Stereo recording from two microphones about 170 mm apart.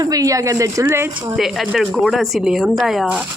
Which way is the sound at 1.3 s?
Centre (ahead or behind).